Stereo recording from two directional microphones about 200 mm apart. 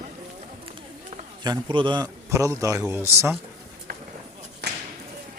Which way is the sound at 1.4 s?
25° right (ahead or behind).